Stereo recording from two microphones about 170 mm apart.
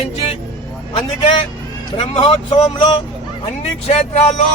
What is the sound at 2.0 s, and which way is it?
Speech, 30° left (ahead or behind).